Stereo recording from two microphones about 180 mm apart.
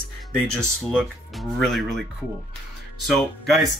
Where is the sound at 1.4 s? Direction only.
Centre (ahead or behind).